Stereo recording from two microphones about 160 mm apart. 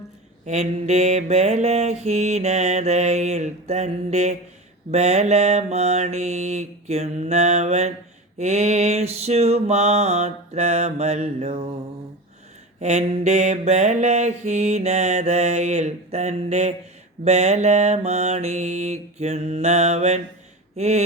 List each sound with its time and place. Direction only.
0.4 s mantra: 45° right (ahead or behind)
12.8 s mantra: 45° right (ahead or behind)